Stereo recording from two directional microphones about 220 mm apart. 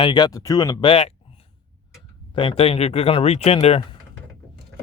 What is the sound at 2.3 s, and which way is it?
Speech, 25° left (ahead or behind).